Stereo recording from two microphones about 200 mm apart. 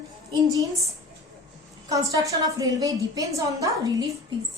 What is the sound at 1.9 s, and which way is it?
A woman's voice, 15° right (ahead or behind).